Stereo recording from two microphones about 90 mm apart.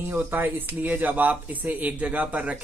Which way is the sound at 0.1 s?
20° right (ahead or behind).